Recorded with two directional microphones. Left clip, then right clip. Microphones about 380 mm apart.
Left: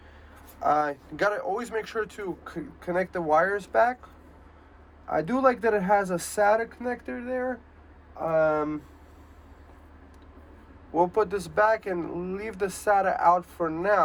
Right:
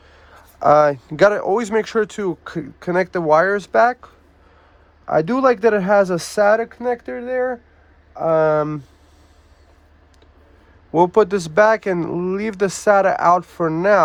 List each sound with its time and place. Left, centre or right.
0.6 s speech: centre
10.9 s speech: right